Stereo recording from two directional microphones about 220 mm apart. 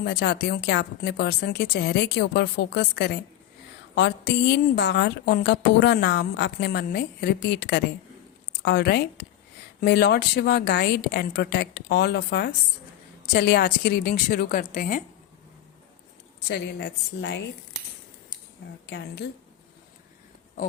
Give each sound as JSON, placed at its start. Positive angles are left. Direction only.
{"t": 0.0, "sound": "a woman's voice", "side_deg": 45}
{"t": 16.5, "sound": "a woman's voice", "side_deg": 50}
{"t": 18.9, "sound": "a woman's voice", "side_deg": 50}